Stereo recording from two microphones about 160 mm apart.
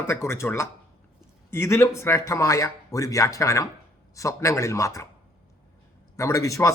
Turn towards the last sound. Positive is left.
turn(degrees=20)  # may be behind; listen again after turning